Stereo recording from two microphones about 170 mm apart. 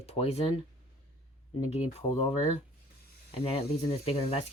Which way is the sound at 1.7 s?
35° left (ahead or behind).